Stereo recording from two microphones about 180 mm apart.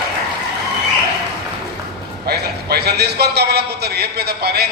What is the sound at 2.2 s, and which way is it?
A man's voice, 60° right (ahead or behind).